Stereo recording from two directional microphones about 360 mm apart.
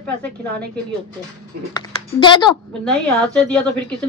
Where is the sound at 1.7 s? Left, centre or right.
Centre.